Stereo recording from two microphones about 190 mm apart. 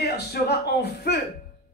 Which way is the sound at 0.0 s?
60° left (ahead or behind).